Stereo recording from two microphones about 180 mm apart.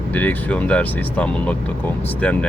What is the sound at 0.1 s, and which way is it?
Speech, 10° left (ahead or behind).